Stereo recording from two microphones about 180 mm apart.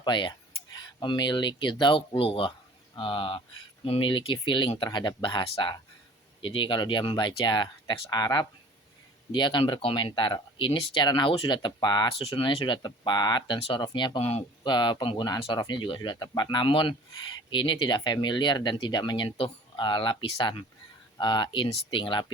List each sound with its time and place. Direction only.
0.0 s speech: 25° left (ahead or behind)